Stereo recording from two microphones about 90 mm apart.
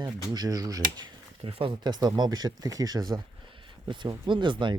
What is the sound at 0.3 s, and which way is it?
Speech, 45° right (ahead or behind).